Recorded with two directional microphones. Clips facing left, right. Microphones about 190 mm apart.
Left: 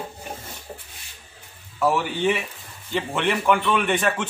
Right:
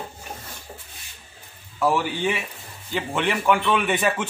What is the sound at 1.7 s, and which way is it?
Speech, centre (ahead or behind).